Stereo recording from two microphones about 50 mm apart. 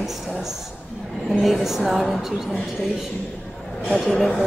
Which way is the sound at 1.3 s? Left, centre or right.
Centre.